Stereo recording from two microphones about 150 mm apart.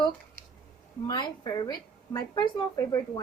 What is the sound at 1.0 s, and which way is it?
Speech, 30° left (ahead or behind).